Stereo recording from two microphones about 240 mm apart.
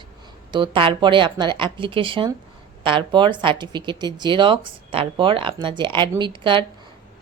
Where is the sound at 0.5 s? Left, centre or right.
Right.